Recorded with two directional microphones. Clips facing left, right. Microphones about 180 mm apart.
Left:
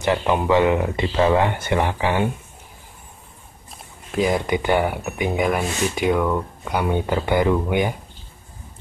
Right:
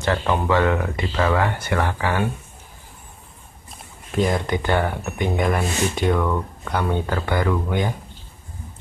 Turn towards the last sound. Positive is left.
turn(degrees=15)  # may be behind; listen again after turning